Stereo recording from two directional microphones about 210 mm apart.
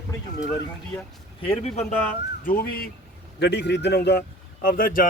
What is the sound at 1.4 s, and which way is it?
Speech, 30° left (ahead or behind).